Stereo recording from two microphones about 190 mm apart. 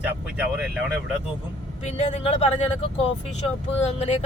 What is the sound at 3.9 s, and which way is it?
Speech, 35° left (ahead or behind).